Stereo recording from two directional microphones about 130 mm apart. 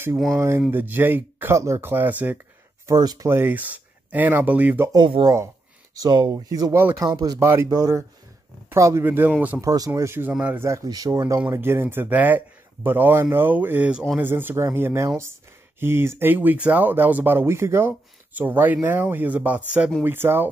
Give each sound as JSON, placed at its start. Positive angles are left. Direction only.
{"t": 0.4, "sound": "speech", "side_deg": -15}
{"t": 2.9, "sound": "a man's voice", "side_deg": -30}
{"t": 3.3, "sound": "speech", "side_deg": -15}
{"t": 4.9, "sound": "a man's voice", "side_deg": -35}
{"t": 7.1, "sound": "speech", "side_deg": -30}
{"t": 7.3, "sound": "a man's voice", "side_deg": -20}
{"t": 9.6, "sound": "a man's voice", "side_deg": -25}